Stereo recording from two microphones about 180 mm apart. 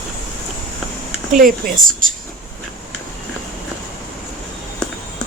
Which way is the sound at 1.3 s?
50° right (ahead or behind).